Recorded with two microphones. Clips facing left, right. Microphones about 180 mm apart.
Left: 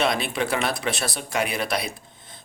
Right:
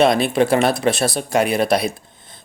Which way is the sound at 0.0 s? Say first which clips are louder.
Right 9 dB; 40° right (ahead or behind).